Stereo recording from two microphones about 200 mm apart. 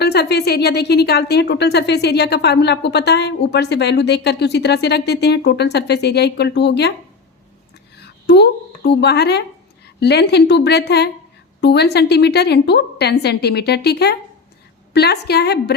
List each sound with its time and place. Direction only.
0.0 s a woman's voice: 55° left (ahead or behind)
7.9 s a woman's voice: 55° left (ahead or behind)